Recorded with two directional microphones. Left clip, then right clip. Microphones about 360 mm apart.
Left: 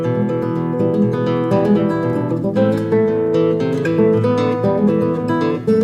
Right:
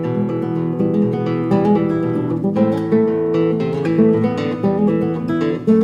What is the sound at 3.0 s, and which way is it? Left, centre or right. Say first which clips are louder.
Music: left 1 dB; centre.